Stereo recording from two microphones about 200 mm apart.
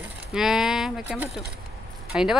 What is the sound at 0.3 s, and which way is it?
Speech, centre (ahead or behind).